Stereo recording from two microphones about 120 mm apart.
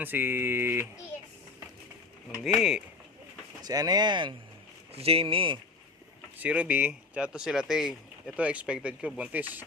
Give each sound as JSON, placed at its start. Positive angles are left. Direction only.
{"t": 0.0, "sound": "speech", "side_deg": -15}
{"t": 2.4, "sound": "speech", "side_deg": -5}
{"t": 3.6, "sound": "speech", "side_deg": -35}
{"t": 4.9, "sound": "speech", "side_deg": -55}
{"t": 6.3, "sound": "speech", "side_deg": -10}